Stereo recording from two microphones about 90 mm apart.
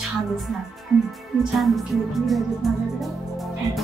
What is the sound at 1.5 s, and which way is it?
Speech, centre (ahead or behind).